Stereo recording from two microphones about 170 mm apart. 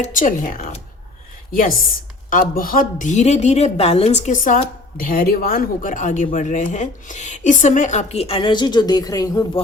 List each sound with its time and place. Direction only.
0.0 s a woman's voice: 50° left (ahead or behind)
2.3 s a woman's voice: 55° left (ahead or behind); by 9.5 s 20° left (ahead or behind)